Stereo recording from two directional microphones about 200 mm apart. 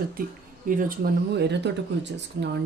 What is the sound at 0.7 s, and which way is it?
Speech, 45° right (ahead or behind).